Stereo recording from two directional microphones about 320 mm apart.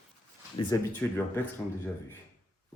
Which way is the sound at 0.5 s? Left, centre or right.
Centre.